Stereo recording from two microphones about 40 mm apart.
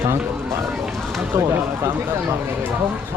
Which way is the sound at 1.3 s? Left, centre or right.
Right.